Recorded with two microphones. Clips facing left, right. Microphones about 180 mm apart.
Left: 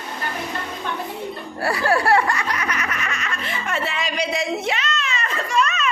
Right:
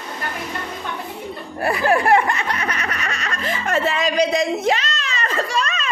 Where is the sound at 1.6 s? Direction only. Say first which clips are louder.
Right 2 dB; 20° right (ahead or behind).